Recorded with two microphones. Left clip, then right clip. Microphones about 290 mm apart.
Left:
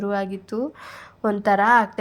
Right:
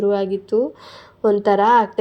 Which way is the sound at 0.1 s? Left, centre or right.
Centre.